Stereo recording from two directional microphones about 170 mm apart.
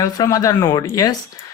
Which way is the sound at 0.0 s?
20° left (ahead or behind).